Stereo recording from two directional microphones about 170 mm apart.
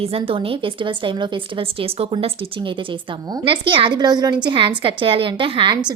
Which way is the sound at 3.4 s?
30° right (ahead or behind).